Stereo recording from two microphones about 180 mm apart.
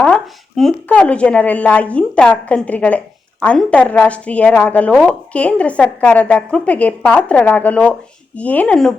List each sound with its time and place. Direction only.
0.0 s speech: 5° left (ahead or behind)